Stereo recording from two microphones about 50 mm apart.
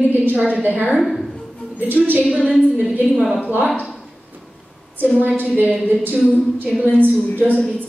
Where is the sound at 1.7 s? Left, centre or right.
Right.